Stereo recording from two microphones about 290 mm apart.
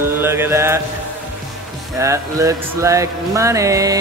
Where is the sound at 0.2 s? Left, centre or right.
Centre.